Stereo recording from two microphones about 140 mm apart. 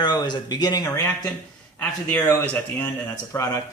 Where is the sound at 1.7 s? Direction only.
10° left (ahead or behind).